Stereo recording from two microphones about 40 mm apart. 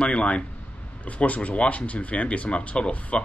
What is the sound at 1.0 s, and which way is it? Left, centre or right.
A man's voice, left.